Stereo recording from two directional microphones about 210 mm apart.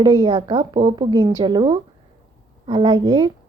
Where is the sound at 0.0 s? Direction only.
20° right (ahead or behind).